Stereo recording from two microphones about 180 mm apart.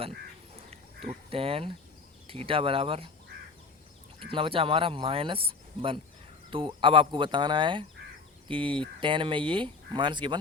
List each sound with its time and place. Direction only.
0.7 s speech: 30° right (ahead or behind)
4.3 s speech: 30° right (ahead or behind)